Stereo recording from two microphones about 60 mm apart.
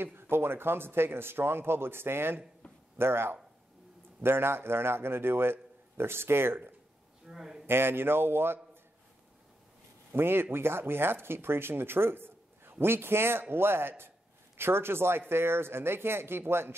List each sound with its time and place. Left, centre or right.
0.0 s speech: right
7.2 s a man's voice: centre
7.6 s speech: right
10.1 s speech: right